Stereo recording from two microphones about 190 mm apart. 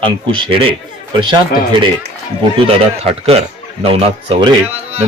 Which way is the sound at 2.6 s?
30° right (ahead or behind).